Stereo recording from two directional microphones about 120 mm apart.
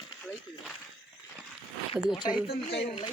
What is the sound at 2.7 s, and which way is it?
Speech, 60° left (ahead or behind).